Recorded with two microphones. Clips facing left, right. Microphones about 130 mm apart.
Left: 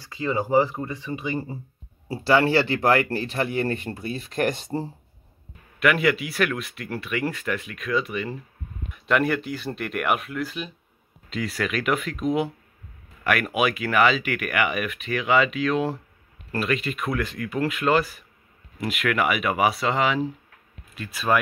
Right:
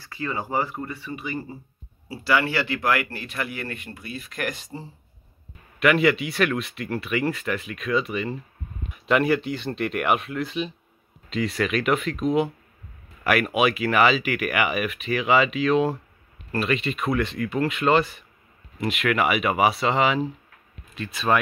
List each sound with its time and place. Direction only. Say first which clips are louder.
0.0 s speech: left 4 dB; 20° left (ahead or behind)
5.8 s speech: right 2 dB; centre (ahead or behind)